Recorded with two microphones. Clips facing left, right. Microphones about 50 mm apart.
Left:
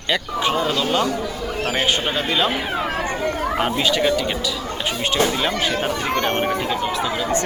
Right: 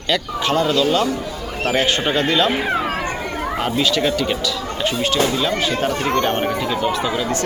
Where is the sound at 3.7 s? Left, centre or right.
Centre.